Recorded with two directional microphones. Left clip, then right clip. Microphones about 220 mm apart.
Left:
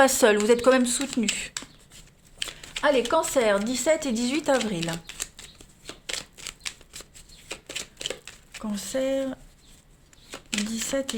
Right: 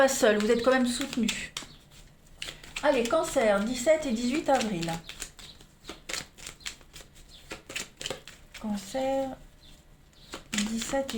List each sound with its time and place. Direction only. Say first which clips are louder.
0.0 s speech: left 4 dB; 40° left (ahead or behind)
2.4 s a sound: left 4 dB; 50° left (ahead or behind)
3.1 s speech: left 3 dB; 50° left (ahead or behind)
6.1 s shuffling cards: left 3 dB; 35° left (ahead or behind)
8.2 s speech: left 3 dB; 40° left (ahead or behind)
10.5 s speech: left 2 dB; 45° left (ahead or behind)